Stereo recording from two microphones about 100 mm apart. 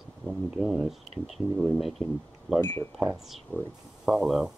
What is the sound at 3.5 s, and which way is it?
Speech, 20° left (ahead or behind).